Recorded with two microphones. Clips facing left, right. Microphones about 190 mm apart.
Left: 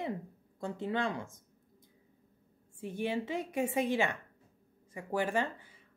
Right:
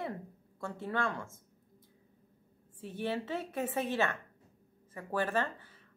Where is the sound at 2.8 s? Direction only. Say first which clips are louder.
Left 2 dB; 15° left (ahead or behind).